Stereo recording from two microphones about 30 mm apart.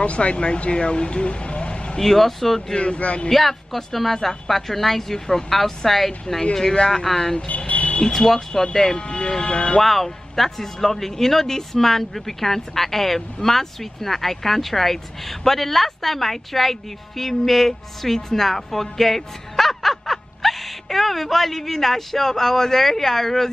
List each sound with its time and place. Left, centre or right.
0.0 s speech: left
2.0 s speech: centre
2.8 s speech: left
3.3 s speech: centre
7.3 s vehicle: left
8.0 s speech: centre
8.9 s speech: left
9.8 s speech: centre